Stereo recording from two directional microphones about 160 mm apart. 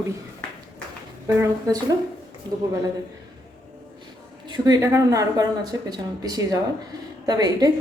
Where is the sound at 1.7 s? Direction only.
20° right (ahead or behind).